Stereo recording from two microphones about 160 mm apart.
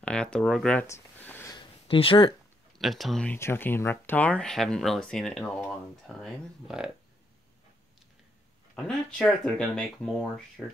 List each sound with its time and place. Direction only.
0.0 s speech: 5° left (ahead or behind)
0.8 s a sound: 15° left (ahead or behind)
1.5 s a sound: 35° left (ahead or behind)
2.8 s speech: centre (ahead or behind)
3.3 s speech: 15° left (ahead or behind); by 6.9 s centre (ahead or behind)
8.7 s speech: centre (ahead or behind)